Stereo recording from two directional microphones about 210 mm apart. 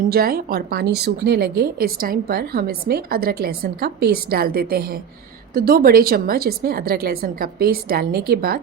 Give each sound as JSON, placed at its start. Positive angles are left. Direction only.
{"t": 0.0, "sound": "a woman's voice", "side_deg": -45}